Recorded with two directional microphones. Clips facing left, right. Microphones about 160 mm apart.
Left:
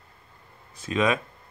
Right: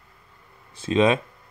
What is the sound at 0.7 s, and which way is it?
Speech, 30° right (ahead or behind).